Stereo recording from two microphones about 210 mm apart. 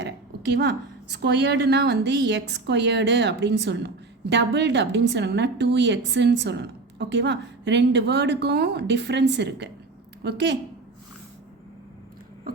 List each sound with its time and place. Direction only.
0.5 s a woman's voice: 50° right (ahead or behind)